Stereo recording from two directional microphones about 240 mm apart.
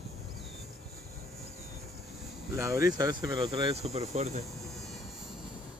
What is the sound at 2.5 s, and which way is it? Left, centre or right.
Speech, centre.